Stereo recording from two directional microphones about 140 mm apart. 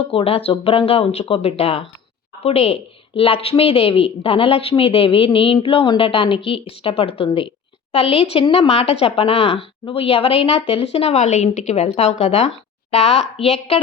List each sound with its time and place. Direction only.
0.0 s a woman's voice: 40° left (ahead or behind)